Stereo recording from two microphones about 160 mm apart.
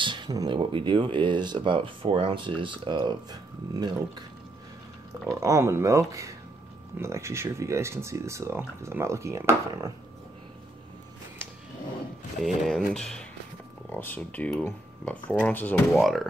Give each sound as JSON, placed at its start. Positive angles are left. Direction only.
{"t": 0.0, "sound": "speech", "side_deg": -25}
{"t": 5.3, "sound": "speech", "side_deg": -20}
{"t": 12.4, "sound": "speech", "side_deg": 0}